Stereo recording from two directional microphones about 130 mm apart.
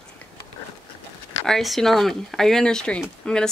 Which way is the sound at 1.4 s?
Centre (ahead or behind).